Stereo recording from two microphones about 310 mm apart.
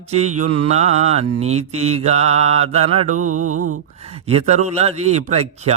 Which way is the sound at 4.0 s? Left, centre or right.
Centre.